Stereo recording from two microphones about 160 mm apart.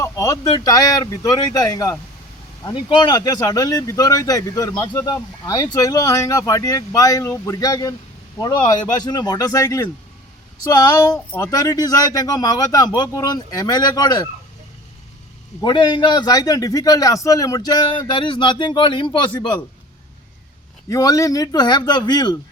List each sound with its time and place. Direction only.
0.0 s speech: 20° left (ahead or behind)
15.6 s speech: 30° left (ahead or behind)
20.9 s speech: 20° left (ahead or behind)